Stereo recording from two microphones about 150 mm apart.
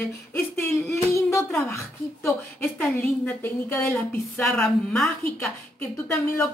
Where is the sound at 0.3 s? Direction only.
15° left (ahead or behind).